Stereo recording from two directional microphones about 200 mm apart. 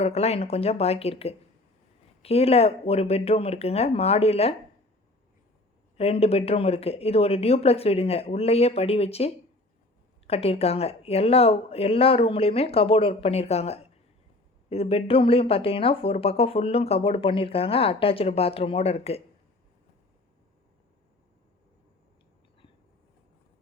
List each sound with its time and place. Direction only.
0.0 s speech: 30° left (ahead or behind)
6.0 s speech: 30° left (ahead or behind)